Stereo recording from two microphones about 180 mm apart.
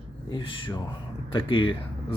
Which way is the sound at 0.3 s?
25° left (ahead or behind).